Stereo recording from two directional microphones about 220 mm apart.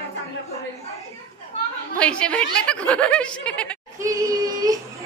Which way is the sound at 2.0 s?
5° left (ahead or behind).